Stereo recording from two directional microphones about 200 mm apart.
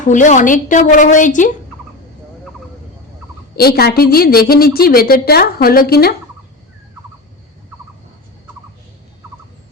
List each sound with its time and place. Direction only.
0.1 s a woman's voice: 40° left (ahead or behind)
3.5 s a woman's voice: 50° left (ahead or behind)